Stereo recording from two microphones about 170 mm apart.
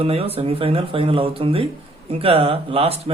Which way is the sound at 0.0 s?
35° right (ahead or behind).